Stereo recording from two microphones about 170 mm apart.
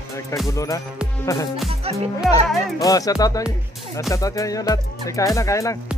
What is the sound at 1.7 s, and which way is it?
Speech, 35° right (ahead or behind).